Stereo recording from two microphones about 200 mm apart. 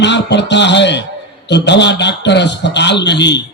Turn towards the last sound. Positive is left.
turn(degrees=60)  # may be behind; listen again after turning